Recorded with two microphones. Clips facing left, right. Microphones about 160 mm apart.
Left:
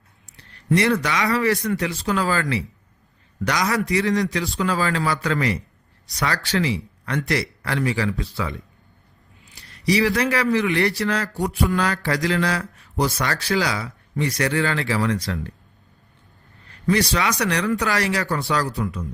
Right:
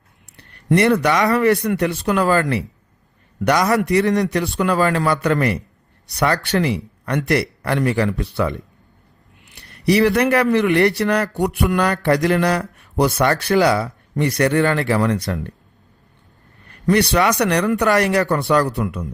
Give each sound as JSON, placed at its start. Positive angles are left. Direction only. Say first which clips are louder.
{"t": 0.3, "sound": "a man's voice", "louder": "right 4 dB", "side_deg": -60}
{"t": 11.3, "sound": "mantra", "louder": "right 4 dB", "side_deg": -65}
{"t": 12.0, "sound": "speech", "louder": "right 6 dB", "side_deg": -55}
{"t": 16.8, "sound": "speech", "louder": "right 5 dB", "side_deg": -60}